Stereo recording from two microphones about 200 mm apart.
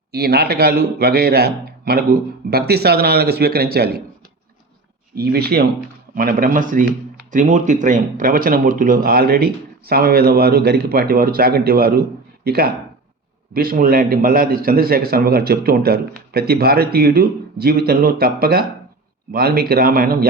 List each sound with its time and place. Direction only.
0.1 s a man's voice: 55° right (ahead or behind)
5.1 s a man's voice: 50° right (ahead or behind)